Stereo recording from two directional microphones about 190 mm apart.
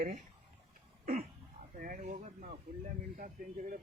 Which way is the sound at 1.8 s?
45° right (ahead or behind).